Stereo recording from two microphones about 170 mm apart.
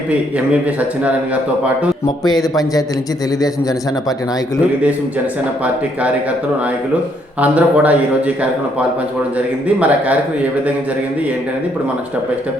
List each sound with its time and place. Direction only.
0.1 s a man's voice: 10° right (ahead or behind)
7.3 s a man's voice: 10° right (ahead or behind)
9.6 s a man's voice: 10° right (ahead or behind)